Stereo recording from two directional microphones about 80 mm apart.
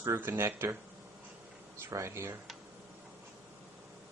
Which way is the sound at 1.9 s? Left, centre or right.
Right.